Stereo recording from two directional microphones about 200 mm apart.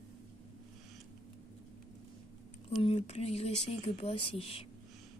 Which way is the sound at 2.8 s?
30° left (ahead or behind).